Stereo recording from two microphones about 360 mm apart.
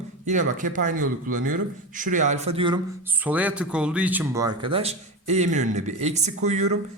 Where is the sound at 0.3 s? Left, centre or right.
Right.